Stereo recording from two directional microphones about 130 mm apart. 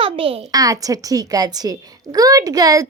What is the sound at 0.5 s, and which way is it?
Speech, 25° right (ahead or behind).